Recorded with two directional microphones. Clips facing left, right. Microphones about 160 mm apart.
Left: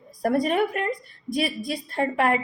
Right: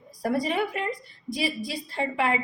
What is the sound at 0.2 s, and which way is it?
A woman's voice, 55° left (ahead or behind).